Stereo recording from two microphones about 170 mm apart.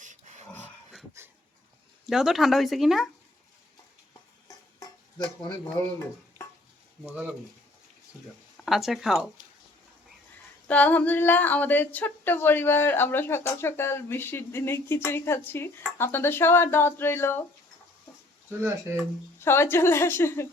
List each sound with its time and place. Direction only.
0.0 s a sound: 45° right (ahead or behind)
1.2 s dog: 15° right (ahead or behind)
2.0 s speech: centre (ahead or behind)
4.4 s stir: 25° left (ahead or behind)
7.0 s speech: 5° right (ahead or behind)
8.5 s speech: centre (ahead or behind)
10.7 s a woman's voice: 10° left (ahead or behind)
18.6 s speech: 15° right (ahead or behind)
19.4 s a woman's voice: 15° left (ahead or behind)